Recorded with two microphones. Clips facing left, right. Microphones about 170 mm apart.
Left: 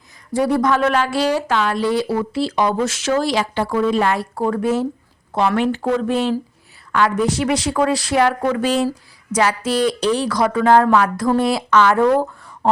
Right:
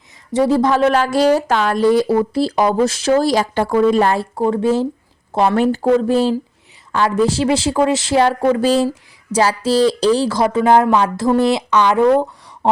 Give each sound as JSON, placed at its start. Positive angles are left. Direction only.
{"t": 0.3, "sound": "a woman's voice", "side_deg": -25}
{"t": 4.4, "sound": "a woman's voice", "side_deg": -20}